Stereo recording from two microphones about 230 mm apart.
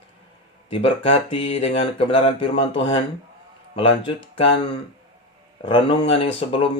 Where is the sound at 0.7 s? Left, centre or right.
Left.